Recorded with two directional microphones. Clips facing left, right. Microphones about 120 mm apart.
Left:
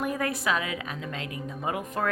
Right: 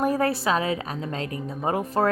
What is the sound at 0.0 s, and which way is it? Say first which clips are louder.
Speech: right 6 dB; 35° right (ahead or behind).